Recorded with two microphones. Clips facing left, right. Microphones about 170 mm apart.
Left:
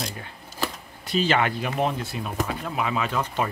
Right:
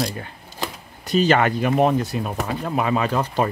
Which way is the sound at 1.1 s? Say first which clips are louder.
Right 5 dB; 45° right (ahead or behind).